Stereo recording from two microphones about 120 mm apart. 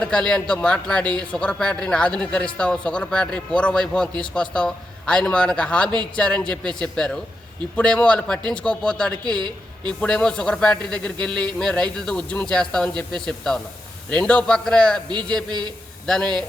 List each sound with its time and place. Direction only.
0.0 s speech: 10° left (ahead or behind)
9.2 s a woman's voice: 40° right (ahead or behind)
10.0 s a man's voice: 10° left (ahead or behind)